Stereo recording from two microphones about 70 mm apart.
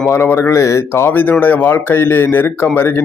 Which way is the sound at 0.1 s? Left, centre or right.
Left.